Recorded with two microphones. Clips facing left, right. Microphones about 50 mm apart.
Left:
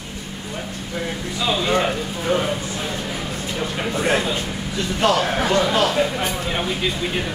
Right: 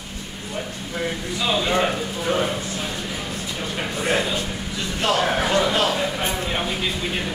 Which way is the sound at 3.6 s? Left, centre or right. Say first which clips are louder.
Left 4 dB; centre.